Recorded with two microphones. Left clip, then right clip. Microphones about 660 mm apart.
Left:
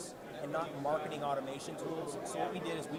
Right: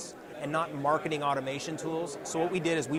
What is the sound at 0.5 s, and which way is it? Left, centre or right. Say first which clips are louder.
Speech: right 7 dB; right.